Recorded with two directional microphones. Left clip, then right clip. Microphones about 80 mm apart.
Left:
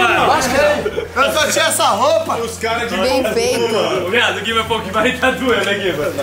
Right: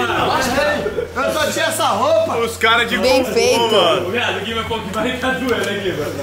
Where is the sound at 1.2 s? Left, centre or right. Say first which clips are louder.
Left 4 dB; centre.